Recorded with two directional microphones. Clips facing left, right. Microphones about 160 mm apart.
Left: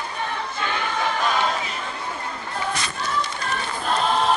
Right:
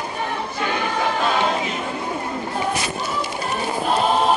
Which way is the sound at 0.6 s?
15° right (ahead or behind).